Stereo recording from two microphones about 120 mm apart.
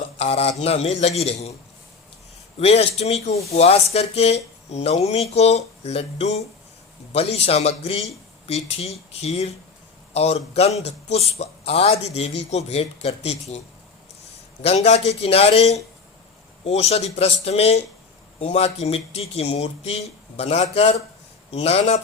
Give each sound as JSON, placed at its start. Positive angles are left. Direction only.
{"t": 0.2, "sound": "speech", "side_deg": 60}
{"t": 2.6, "sound": "speech", "side_deg": 55}
{"t": 14.6, "sound": "speech", "side_deg": 60}